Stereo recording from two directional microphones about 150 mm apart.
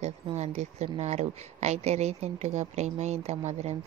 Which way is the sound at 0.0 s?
50° right (ahead or behind).